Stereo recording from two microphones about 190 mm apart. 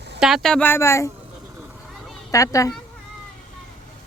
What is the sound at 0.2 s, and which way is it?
Speech, centre (ahead or behind).